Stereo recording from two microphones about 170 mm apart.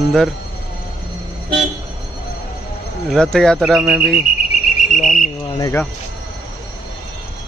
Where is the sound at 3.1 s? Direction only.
5° left (ahead or behind).